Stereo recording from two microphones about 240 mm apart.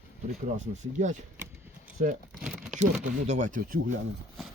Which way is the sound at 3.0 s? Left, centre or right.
Right.